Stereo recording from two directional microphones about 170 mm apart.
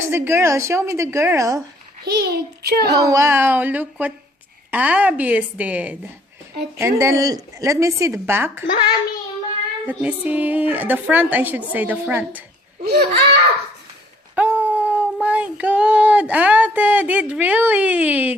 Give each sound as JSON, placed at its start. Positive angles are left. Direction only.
{"t": 0.1, "sound": "speech", "side_deg": -15}
{"t": 2.0, "sound": "a child's voice", "side_deg": -70}
{"t": 2.8, "sound": "speech", "side_deg": -20}
{"t": 9.8, "sound": "speech", "side_deg": -10}
{"t": 12.8, "sound": "a child's voice", "side_deg": -70}
{"t": 14.3, "sound": "a sound", "side_deg": -10}
{"t": 15.6, "sound": "speech", "side_deg": -5}